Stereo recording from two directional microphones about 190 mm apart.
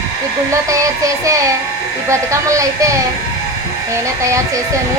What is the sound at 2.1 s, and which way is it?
Speech, 15° right (ahead or behind).